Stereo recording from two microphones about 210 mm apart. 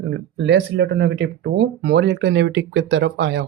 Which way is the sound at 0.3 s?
55° right (ahead or behind).